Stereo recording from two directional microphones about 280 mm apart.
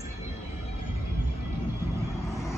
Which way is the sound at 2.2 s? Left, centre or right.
Centre.